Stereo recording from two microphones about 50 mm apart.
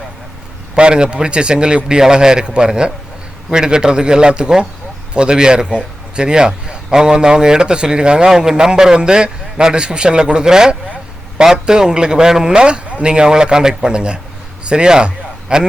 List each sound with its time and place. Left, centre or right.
0.8 s a man's voice: centre